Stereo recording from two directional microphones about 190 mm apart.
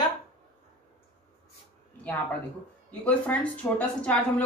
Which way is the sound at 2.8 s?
10° left (ahead or behind).